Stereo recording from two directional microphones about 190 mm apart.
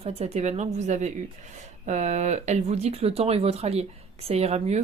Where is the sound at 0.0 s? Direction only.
35° right (ahead or behind).